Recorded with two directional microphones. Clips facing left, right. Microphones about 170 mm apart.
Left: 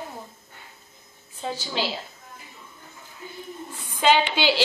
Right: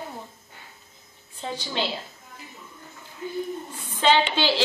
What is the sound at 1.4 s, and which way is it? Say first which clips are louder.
Speech: left 1 dB; 5° left (ahead or behind).